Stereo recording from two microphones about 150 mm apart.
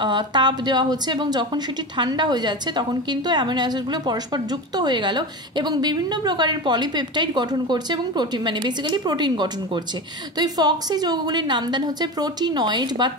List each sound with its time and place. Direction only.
0.0 s speech: 30° right (ahead or behind)